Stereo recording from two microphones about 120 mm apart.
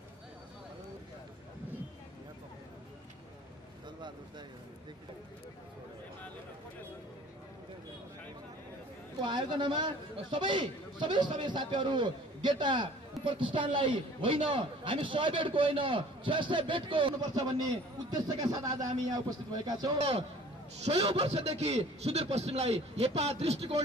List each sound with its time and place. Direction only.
9.2 s a man's voice: 40° right (ahead or behind)
20.0 s a man's voice: 60° right (ahead or behind)